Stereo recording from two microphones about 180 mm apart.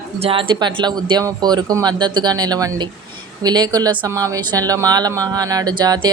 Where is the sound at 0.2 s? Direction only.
30° right (ahead or behind).